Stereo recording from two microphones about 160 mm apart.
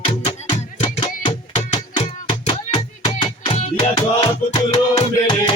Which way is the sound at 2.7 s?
30° left (ahead or behind).